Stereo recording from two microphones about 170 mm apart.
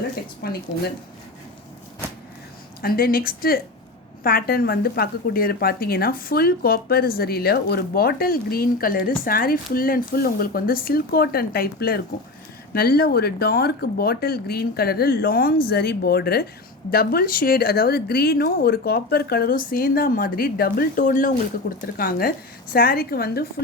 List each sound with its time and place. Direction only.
0.4 s a woman's voice: 65° left (ahead or behind)
2.8 s a woman's voice: 60° left (ahead or behind)
21.8 s a woman's voice: 60° left (ahead or behind)